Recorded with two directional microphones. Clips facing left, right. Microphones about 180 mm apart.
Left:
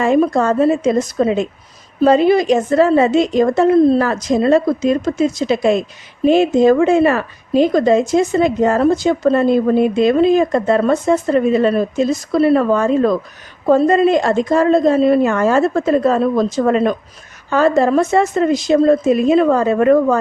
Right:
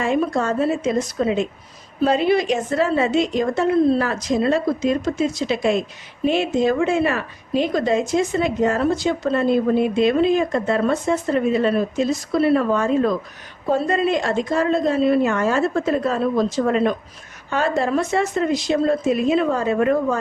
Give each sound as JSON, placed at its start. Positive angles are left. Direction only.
{"t": 0.0, "sound": "speech", "side_deg": 45}